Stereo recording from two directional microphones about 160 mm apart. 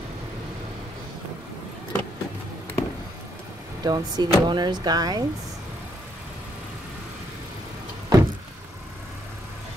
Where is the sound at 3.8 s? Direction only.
25° right (ahead or behind).